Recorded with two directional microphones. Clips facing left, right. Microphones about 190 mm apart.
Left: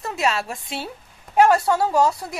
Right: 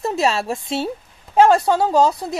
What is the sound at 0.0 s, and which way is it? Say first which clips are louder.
A woman's voice: right 4 dB; 25° right (ahead or behind).